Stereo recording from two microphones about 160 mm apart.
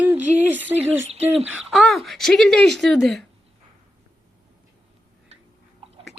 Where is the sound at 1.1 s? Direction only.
40° right (ahead or behind).